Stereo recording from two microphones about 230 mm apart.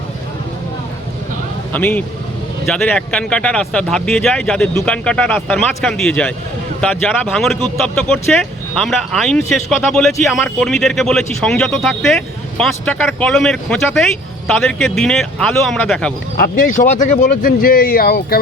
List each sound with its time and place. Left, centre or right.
1.7 s speech: centre
16.4 s speech: left